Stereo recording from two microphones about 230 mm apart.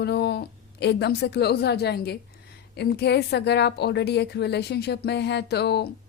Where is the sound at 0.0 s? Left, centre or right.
Left.